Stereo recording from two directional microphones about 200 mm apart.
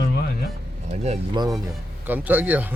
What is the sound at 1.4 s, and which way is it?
Speech, 20° right (ahead or behind).